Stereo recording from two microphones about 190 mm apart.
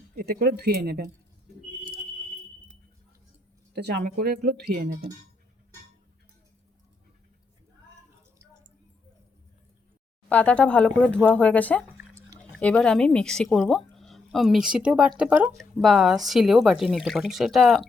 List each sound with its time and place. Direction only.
0.2 s speech: 55° right (ahead or behind)
4.0 s speech: 50° right (ahead or behind)
10.2 s speech: 5° left (ahead or behind)
11.9 s drip: 15° right (ahead or behind)
12.4 s speech: 5° left (ahead or behind)